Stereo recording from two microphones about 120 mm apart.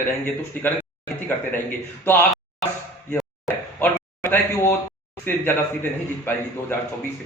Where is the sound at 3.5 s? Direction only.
15° left (ahead or behind).